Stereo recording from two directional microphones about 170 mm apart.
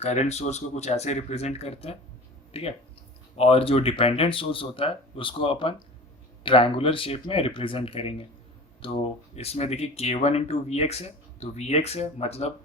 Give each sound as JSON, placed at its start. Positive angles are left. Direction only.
{"t": 0.0, "sound": "speech", "side_deg": 40}